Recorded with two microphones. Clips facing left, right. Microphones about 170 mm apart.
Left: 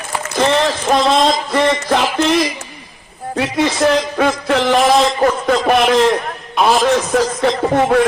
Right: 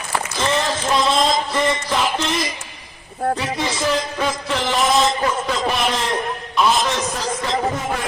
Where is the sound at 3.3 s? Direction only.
60° left (ahead or behind).